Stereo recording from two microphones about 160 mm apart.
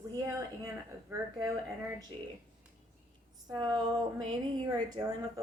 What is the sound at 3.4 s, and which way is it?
A woman's voice, 30° right (ahead or behind).